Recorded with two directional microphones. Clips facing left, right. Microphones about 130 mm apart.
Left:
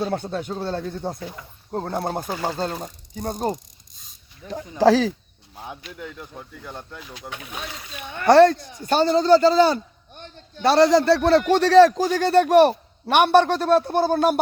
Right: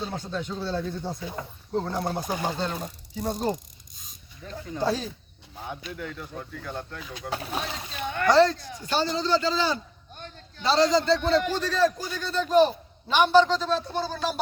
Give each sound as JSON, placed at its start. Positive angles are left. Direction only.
{"t": 0.1, "sound": "speech", "side_deg": 55}
{"t": 2.2, "sound": "speech", "side_deg": -15}
{"t": 3.2, "sound": "speech", "side_deg": 45}
{"t": 4.4, "sound": "speech", "side_deg": 10}
{"t": 4.8, "sound": "speech", "side_deg": 90}
{"t": 7.3, "sound": "speech", "side_deg": -35}
{"t": 8.3, "sound": "speech", "side_deg": 60}
{"t": 8.9, "sound": "speech", "side_deg": 50}
{"t": 10.6, "sound": "a man's voice", "side_deg": 65}